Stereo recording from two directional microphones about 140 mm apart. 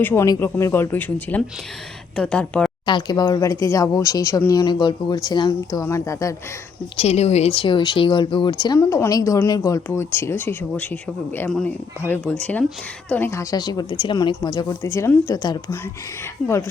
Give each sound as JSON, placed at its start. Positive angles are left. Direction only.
{"t": 0.0, "sound": "speech", "side_deg": 15}
{"t": 2.8, "sound": "speech", "side_deg": 30}
{"t": 6.9, "sound": "speech", "side_deg": 45}